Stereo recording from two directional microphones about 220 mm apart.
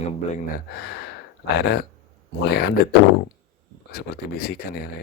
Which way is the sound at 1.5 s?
50° left (ahead or behind).